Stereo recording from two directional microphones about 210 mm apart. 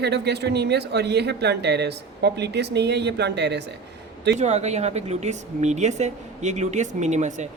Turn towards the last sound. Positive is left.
turn(degrees=-35)  # may be behind; listen again after turning